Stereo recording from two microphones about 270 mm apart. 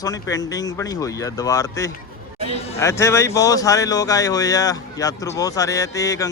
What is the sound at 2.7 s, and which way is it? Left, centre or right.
Speech, centre.